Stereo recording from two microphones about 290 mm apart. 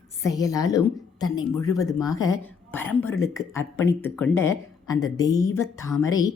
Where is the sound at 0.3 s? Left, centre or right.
Centre.